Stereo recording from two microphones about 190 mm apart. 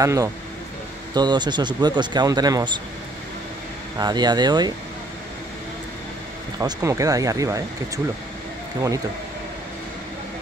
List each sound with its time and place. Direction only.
0.0 s speech: 15° right (ahead or behind)
4.0 s speech: 20° right (ahead or behind)
6.6 s speech: 15° right (ahead or behind)